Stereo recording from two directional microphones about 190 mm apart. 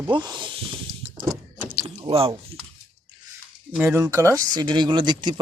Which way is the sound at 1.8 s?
30° right (ahead or behind).